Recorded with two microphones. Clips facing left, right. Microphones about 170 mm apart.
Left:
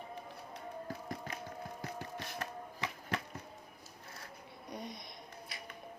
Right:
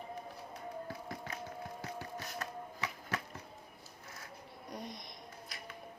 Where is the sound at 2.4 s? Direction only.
30° left (ahead or behind).